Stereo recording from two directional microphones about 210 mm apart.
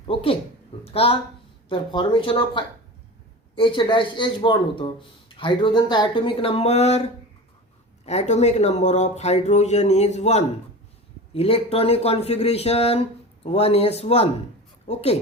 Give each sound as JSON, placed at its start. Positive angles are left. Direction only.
{"t": 0.1, "sound": "speech", "side_deg": 25}